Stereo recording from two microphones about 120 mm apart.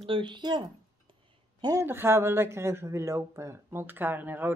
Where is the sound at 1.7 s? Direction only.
20° right (ahead or behind).